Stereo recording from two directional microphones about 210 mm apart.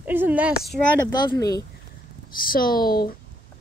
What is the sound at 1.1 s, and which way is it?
Speech, 15° left (ahead or behind).